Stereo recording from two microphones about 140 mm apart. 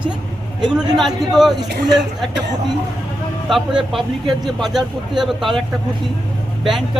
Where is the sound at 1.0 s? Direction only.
Centre (ahead or behind).